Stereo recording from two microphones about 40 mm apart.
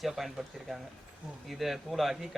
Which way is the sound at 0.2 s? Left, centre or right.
Centre.